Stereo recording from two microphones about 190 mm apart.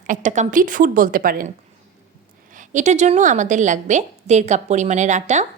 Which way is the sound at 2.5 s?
40° right (ahead or behind).